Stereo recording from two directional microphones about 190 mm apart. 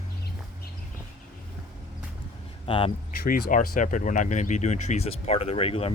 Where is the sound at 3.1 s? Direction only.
50° left (ahead or behind).